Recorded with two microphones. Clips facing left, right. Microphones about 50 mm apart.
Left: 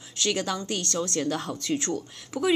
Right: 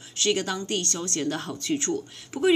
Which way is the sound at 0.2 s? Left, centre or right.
Right.